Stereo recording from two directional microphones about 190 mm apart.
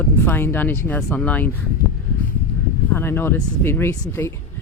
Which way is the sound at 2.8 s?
10° left (ahead or behind).